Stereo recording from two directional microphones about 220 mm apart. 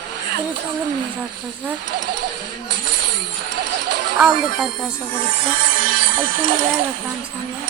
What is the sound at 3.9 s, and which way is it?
Speech, 50° right (ahead or behind).